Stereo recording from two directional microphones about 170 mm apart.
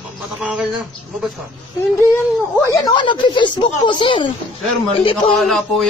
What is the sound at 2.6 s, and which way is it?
Speech, 20° left (ahead or behind).